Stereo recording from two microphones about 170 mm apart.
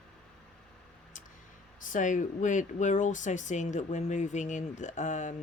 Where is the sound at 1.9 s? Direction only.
50° left (ahead or behind).